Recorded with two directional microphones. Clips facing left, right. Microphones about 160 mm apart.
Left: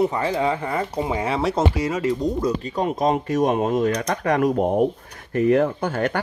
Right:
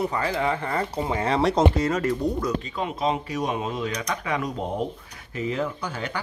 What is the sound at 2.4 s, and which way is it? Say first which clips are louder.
Speech: left 5 dB; 40° left (ahead or behind).